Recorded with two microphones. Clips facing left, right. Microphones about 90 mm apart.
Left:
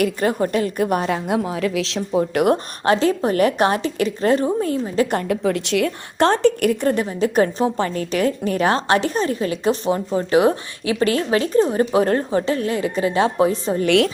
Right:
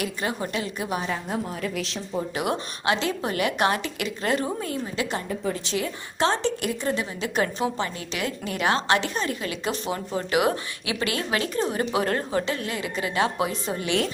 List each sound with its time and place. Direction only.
0.0 s a woman's voice: 45° left (ahead or behind)
1.0 s a woman's voice: 90° left
2.0 s a woman's voice: 55° left (ahead or behind); by 5.0 s 35° left (ahead or behind)
5.3 s a woman's voice: 90° left; by 13.8 s 35° left (ahead or behind)
13.8 s a woman's voice: 65° left (ahead or behind)